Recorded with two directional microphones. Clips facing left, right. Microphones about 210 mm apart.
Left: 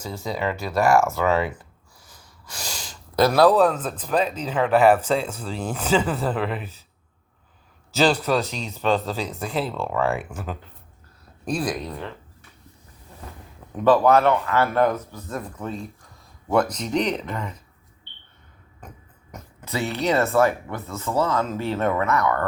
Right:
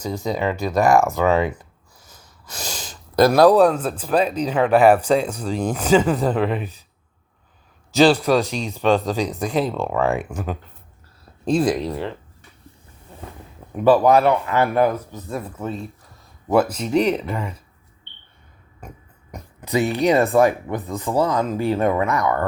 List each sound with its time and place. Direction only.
0.0 s speech: 15° right (ahead or behind)
2.0 s snort: 20° right (ahead or behind)
3.2 s speech: 15° right (ahead or behind)
7.9 s speech: 10° right (ahead or behind)
11.4 s speech: 25° right (ahead or behind)
13.7 s speech: 10° right (ahead or behind)
18.8 s music: 10° right (ahead or behind)
19.3 s speech: 15° right (ahead or behind)